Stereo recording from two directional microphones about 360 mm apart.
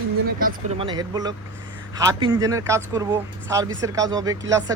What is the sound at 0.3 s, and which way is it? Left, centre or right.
Speech, right.